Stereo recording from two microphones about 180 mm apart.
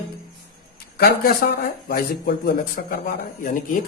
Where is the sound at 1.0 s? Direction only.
55° left (ahead or behind).